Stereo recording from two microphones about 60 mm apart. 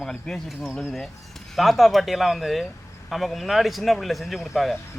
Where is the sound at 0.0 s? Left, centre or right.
Centre.